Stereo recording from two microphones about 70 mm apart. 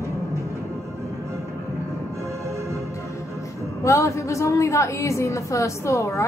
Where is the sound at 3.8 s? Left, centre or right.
Left.